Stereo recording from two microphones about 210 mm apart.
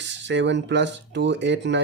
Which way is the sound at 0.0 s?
55° right (ahead or behind).